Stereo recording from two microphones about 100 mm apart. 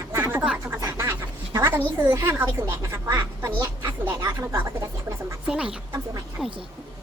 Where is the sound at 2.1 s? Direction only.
25° right (ahead or behind).